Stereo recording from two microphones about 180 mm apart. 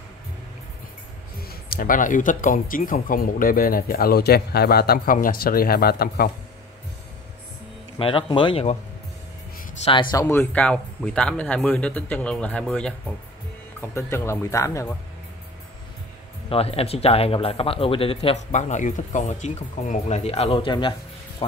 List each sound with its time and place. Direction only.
1.5 s speech: 55° left (ahead or behind)
8.0 s speech: 30° left (ahead or behind)
10.1 s speech: 15° left (ahead or behind)
10.4 s speech: 5° left (ahead or behind)
16.4 s speech: 35° left (ahead or behind)